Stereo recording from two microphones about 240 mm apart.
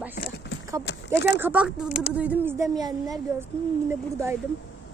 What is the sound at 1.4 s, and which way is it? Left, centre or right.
A woman's voice, centre.